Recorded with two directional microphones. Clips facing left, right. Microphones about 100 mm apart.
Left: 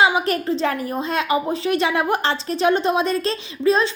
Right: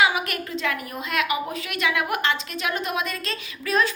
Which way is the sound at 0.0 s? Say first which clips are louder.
Left 5 dB; 30° left (ahead or behind).